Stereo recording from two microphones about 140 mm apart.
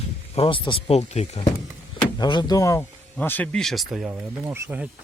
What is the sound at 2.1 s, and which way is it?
Speech, 30° left (ahead or behind).